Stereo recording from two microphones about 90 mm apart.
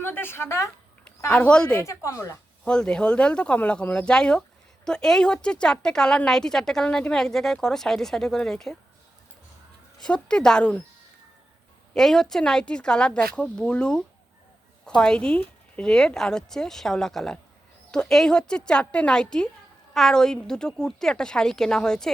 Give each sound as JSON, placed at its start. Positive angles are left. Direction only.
{"t": 0.0, "sound": "a woman's voice", "side_deg": 25}
{"t": 1.3, "sound": "speech", "side_deg": 15}
{"t": 1.8, "sound": "speech", "side_deg": 35}
{"t": 2.6, "sound": "speech", "side_deg": 10}
{"t": 10.0, "sound": "speech", "side_deg": 10}
{"t": 11.9, "sound": "speech", "side_deg": 5}